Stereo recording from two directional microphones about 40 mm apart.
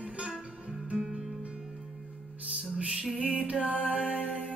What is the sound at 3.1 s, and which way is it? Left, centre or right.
Music, right.